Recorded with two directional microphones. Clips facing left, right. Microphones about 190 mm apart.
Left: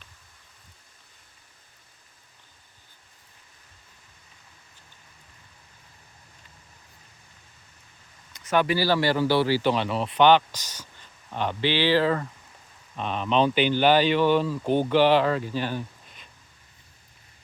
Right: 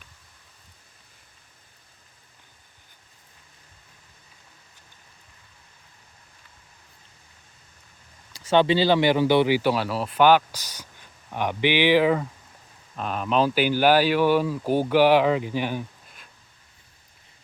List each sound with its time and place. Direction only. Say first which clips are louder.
8.3 s speech: right 4 dB; 30° right (ahead or behind)
13.0 s speech: even; 5° right (ahead or behind)
16.0 s a sound: even; 5° right (ahead or behind)